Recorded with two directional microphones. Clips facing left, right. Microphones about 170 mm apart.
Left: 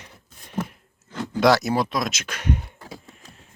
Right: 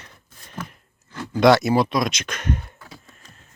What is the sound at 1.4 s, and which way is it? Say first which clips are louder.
Speech: right 3 dB; centre (ahead or behind).